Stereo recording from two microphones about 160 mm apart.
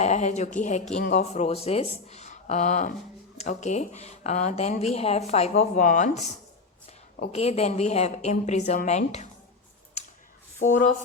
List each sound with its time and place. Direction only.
0.0 s speech: 45° left (ahead or behind)